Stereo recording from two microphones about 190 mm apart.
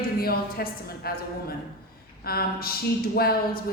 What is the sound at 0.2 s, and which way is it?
A woman's voice, 50° left (ahead or behind).